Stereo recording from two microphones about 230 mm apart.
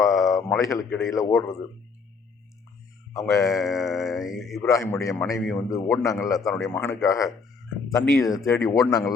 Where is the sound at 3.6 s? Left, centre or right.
Centre.